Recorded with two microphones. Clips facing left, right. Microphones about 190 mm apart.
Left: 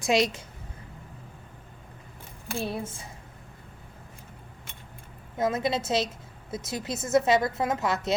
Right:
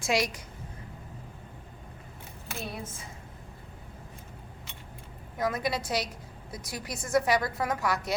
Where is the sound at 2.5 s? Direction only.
30° left (ahead or behind).